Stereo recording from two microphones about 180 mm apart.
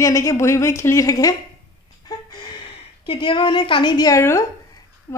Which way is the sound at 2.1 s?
20° left (ahead or behind).